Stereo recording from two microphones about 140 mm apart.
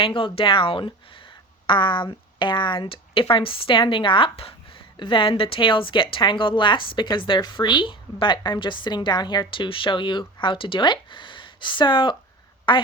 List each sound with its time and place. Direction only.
0.0 s speech: 40° left (ahead or behind)